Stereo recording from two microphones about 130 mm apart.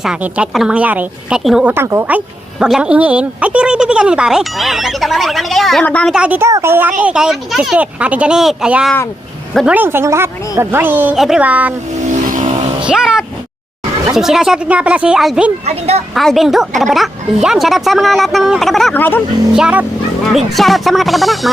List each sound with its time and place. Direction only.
0.0 s speech: 5° right (ahead or behind)
1.7 s a woman's voice: 20° right (ahead or behind); by 6.1 s 10° left (ahead or behind)
6.1 s speech: 10° right (ahead or behind)
7.0 s speech: 5° right (ahead or behind)
12.1 s vehicle: 70° right (ahead or behind)
12.8 s speech: 5° right (ahead or behind)
15.6 s speech: 55° right (ahead or behind)
16.1 s speech: centre (ahead or behind)
18.9 s a woman's voice: 15° left (ahead or behind)
19.5 s speech: 5° right (ahead or behind)